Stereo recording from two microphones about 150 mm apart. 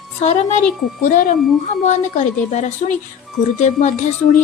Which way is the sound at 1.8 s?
50° left (ahead or behind).